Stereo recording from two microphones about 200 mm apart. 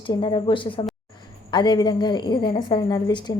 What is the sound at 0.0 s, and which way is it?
A woman's voice, 25° left (ahead or behind).